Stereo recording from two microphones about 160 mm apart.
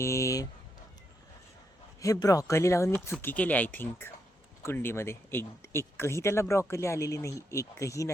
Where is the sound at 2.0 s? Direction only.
20° left (ahead or behind).